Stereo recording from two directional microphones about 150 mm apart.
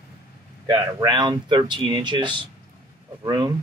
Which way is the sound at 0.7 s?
25° right (ahead or behind).